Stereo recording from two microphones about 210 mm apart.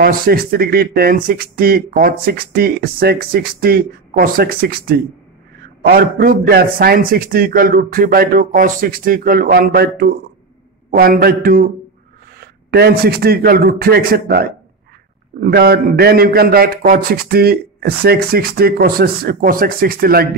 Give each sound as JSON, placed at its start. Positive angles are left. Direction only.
{"t": 0.0, "sound": "speech", "side_deg": -45}